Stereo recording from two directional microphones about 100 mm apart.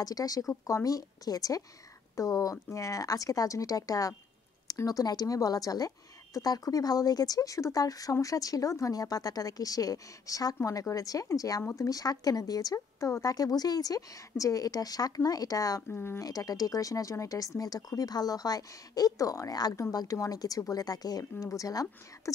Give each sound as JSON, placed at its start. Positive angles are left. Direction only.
{"t": 0.0, "sound": "a woman's voice", "side_deg": 40}
{"t": 15.9, "sound": "speech", "side_deg": 25}
{"t": 16.3, "sound": "a woman's voice", "side_deg": 35}